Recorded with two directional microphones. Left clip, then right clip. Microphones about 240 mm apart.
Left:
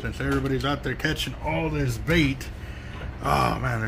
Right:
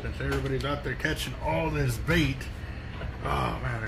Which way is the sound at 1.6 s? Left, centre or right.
Centre.